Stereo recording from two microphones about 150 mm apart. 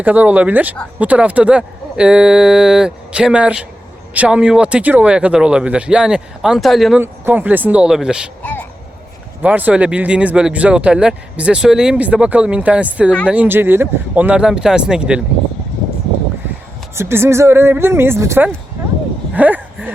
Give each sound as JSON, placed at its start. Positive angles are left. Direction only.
{"t": 0.0, "sound": "speech", "side_deg": -10}
{"t": 7.0, "sound": "speech", "side_deg": -15}
{"t": 8.4, "sound": "a sound", "side_deg": 10}
{"t": 9.4, "sound": "speech", "side_deg": -10}
{"t": 16.9, "sound": "speech", "side_deg": -15}
{"t": 19.3, "sound": "a sound", "side_deg": -10}